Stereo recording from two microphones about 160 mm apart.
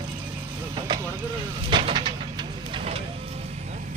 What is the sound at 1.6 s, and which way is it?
Vehicle, 30° right (ahead or behind).